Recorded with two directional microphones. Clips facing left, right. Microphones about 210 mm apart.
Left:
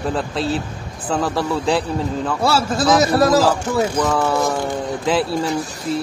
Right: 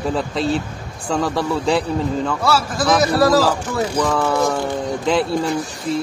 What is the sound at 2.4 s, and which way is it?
Speech, 25° left (ahead or behind).